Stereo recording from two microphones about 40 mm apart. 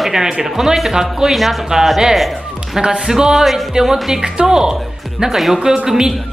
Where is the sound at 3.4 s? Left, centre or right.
Centre.